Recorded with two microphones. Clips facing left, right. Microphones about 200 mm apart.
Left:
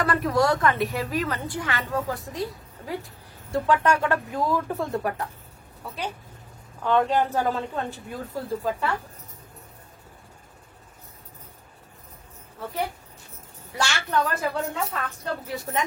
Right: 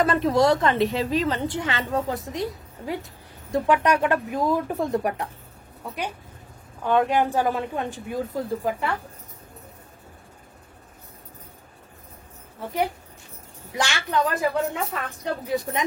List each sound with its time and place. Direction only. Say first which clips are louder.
0.0 s a woman's voice: right 3 dB; 25° right (ahead or behind)
6.8 s a woman's voice: right 1 dB; 15° right (ahead or behind)
12.5 s a woman's voice: right 4 dB; 15° right (ahead or behind)